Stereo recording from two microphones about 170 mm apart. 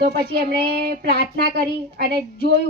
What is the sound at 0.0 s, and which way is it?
A woman's voice, 65° right (ahead or behind).